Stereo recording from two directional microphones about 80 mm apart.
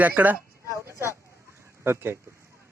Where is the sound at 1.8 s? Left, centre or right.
Right.